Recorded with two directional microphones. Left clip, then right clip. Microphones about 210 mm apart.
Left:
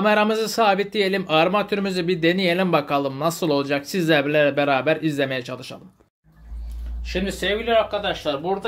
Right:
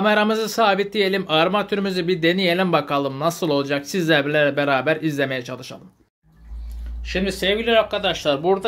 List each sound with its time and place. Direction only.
0.0 s a man's voice: centre (ahead or behind)
7.1 s speech: 20° right (ahead or behind)
7.3 s speech: 45° right (ahead or behind)